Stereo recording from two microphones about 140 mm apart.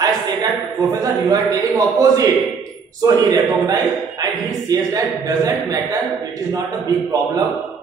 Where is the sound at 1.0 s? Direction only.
25° right (ahead or behind).